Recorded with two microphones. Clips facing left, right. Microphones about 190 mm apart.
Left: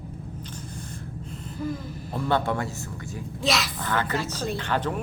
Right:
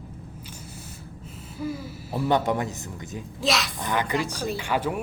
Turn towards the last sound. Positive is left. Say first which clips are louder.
# right 1 dB
turn(degrees=-10)  # may be behind; listen again after turning